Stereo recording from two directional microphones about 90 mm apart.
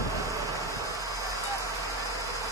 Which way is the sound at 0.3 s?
35° right (ahead or behind).